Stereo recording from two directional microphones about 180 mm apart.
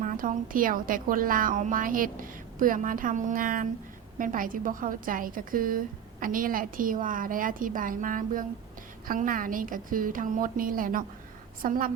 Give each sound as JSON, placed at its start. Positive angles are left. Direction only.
{"t": 0.0, "sound": "a woman's voice", "side_deg": -45}